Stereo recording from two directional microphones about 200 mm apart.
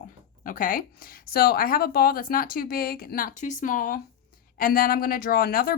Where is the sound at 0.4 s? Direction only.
45° left (ahead or behind).